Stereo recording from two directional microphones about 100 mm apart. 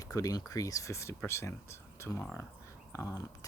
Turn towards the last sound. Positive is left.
turn(degrees=30)  # may be behind; listen again after turning